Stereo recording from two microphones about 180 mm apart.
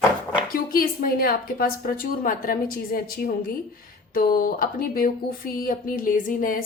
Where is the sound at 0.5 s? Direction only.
55° left (ahead or behind).